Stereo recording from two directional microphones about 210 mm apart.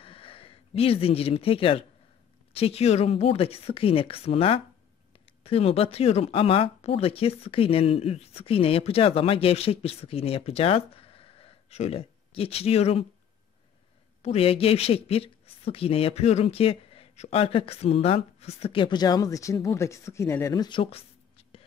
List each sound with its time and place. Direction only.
0.0 s speech: 25° left (ahead or behind)
14.2 s speech: 30° left (ahead or behind)